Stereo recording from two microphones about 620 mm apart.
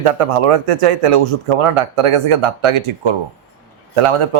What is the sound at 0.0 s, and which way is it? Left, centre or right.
A man's voice, right.